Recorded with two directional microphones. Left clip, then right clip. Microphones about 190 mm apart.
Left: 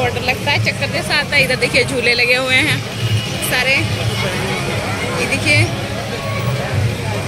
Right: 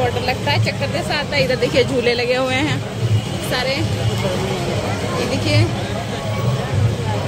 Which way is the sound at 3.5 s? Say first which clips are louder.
Left 5 dB; 20° right (ahead or behind).